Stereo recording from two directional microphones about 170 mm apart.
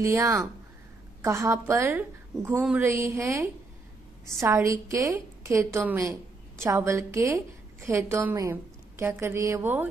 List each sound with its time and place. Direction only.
0.0 s a woman's voice: 15° right (ahead or behind)